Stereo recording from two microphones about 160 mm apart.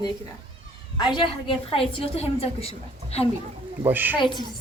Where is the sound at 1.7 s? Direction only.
40° left (ahead or behind).